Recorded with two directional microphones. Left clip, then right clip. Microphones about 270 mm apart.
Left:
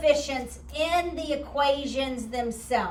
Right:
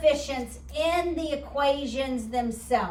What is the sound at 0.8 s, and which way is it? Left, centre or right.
A woman's voice, centre.